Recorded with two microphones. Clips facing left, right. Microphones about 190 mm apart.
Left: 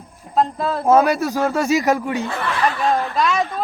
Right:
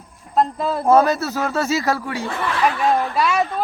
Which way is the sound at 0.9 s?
10° left (ahead or behind).